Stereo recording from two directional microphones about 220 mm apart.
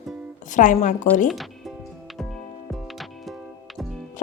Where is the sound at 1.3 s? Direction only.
Centre (ahead or behind).